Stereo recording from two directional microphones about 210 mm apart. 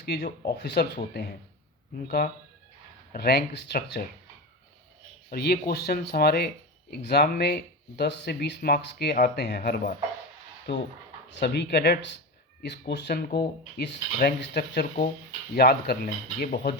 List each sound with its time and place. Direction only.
0.0 s speech: 50° left (ahead or behind)
3.1 s speech: 50° left (ahead or behind)
5.3 s speech: 50° left (ahead or behind)
9.6 s speech: 40° left (ahead or behind)
10.7 s speech: 55° left (ahead or behind)